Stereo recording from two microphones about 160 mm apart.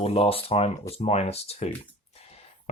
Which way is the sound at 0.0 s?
35° left (ahead or behind).